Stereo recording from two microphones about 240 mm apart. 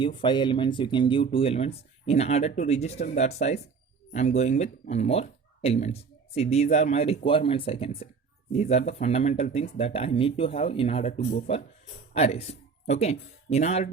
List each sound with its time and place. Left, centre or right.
0.0 s speech: centre